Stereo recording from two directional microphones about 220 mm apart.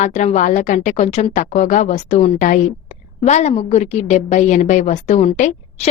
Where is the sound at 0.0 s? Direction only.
30° left (ahead or behind).